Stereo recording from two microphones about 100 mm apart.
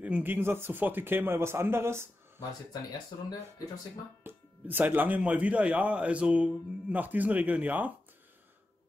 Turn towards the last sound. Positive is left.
turn(degrees=-15)  # may be behind; listen again after turning